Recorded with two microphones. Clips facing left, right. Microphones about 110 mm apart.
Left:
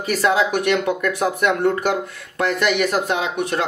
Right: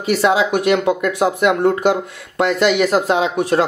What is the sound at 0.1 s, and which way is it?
Speech, 25° right (ahead or behind).